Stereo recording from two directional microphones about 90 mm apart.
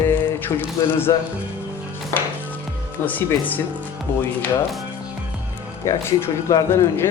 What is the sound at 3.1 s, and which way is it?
Speech, 20° left (ahead or behind).